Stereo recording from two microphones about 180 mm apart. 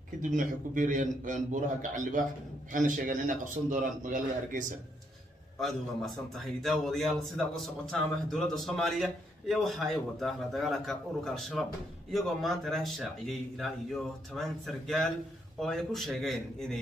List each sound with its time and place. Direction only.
0.2 s a man's voice: 45° right (ahead or behind)
5.6 s a man's voice: centre (ahead or behind)